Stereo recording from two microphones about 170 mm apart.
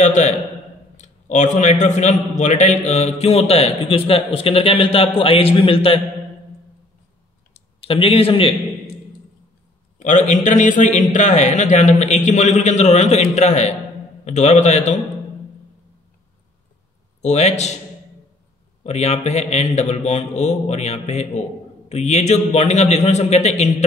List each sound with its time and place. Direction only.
0.0 s a man's voice: 45° left (ahead or behind)
7.8 s a man's voice: 30° left (ahead or behind)
9.9 s a man's voice: 50° left (ahead or behind)
17.2 s a man's voice: 40° left (ahead or behind)
18.9 s a man's voice: 40° left (ahead or behind)